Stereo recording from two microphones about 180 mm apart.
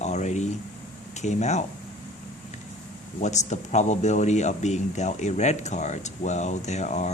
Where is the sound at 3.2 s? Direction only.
40° left (ahead or behind).